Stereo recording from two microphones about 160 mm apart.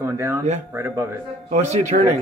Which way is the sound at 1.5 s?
45° right (ahead or behind).